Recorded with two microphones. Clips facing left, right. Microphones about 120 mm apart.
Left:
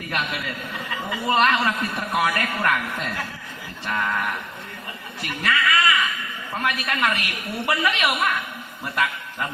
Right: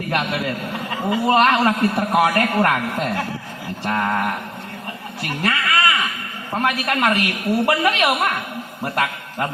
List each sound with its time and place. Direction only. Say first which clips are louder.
0.1 s a woman's voice: right 6 dB; 35° right (ahead or behind)
5.3 s a sound: right 1 dB; 40° right (ahead or behind)
6.6 s a man's voice: right 4 dB; 45° right (ahead or behind)